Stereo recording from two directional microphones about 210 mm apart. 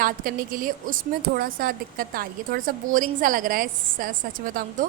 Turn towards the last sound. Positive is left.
turn(degrees=-40)  # may be behind; listen again after turning